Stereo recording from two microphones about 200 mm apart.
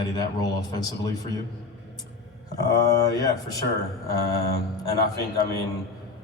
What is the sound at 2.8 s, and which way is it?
Speech, 20° left (ahead or behind).